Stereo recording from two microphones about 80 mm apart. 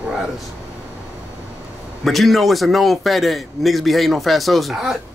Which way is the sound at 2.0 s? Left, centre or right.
Centre.